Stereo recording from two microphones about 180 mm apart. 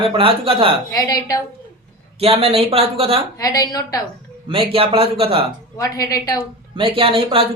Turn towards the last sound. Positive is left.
turn(degrees=-30)  # may be behind; listen again after turning